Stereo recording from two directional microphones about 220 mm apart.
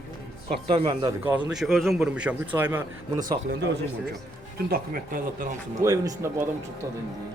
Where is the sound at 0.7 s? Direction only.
20° right (ahead or behind).